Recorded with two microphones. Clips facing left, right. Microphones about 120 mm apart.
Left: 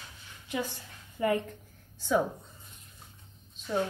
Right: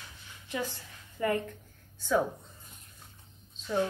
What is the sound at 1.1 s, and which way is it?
Speech, 20° left (ahead or behind).